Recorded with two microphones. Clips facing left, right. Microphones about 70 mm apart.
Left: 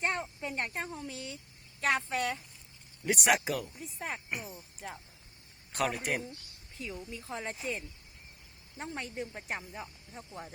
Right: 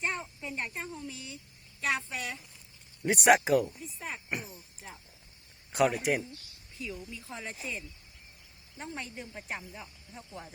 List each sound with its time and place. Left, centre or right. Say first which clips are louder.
0.0 s a woman's voice: left 2 dB; left
3.1 s speech: right 6 dB; right
3.8 s a woman's voice: left 1 dB; left
5.7 s speech: right 5 dB; centre
6.7 s speech: right 1 dB; left
9.3 s speech: left 1 dB; left